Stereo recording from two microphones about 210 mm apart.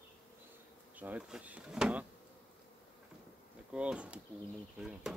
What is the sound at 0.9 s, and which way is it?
Speech, 5° right (ahead or behind).